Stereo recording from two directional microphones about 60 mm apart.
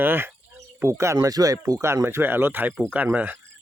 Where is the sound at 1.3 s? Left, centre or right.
Right.